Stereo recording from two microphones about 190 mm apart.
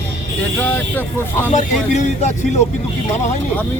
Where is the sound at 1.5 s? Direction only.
40° left (ahead or behind).